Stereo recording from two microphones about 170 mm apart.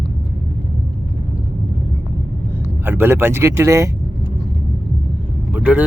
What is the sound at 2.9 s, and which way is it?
Speech, 15° right (ahead or behind).